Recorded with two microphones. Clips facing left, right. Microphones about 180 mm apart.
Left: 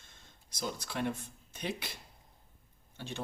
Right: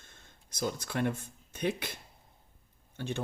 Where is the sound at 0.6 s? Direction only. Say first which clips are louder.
Right 4 dB; 50° right (ahead or behind).